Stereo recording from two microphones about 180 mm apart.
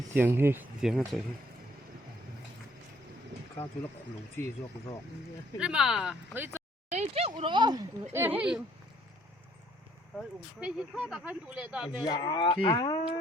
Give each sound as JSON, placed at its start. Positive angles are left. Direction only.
{"t": 0.1, "sound": "speech", "side_deg": -10}
{"t": 4.4, "sound": "speech", "side_deg": 10}
{"t": 5.5, "sound": "speech", "side_deg": -5}
{"t": 6.9, "sound": "speech", "side_deg": -35}
{"t": 8.1, "sound": "speech", "side_deg": -10}
{"t": 10.6, "sound": "speech", "side_deg": -5}
{"t": 12.0, "sound": "speech", "side_deg": 25}